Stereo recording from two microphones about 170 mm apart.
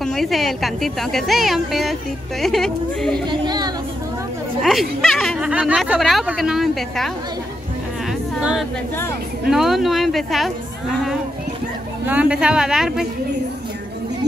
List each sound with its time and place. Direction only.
0.0 s a woman's voice: centre (ahead or behind)
3.3 s a sound: 25° right (ahead or behind)
4.6 s speech: centre (ahead or behind)
8.4 s a woman's voice: 5° right (ahead or behind)
12.1 s a woman's voice: 5° right (ahead or behind)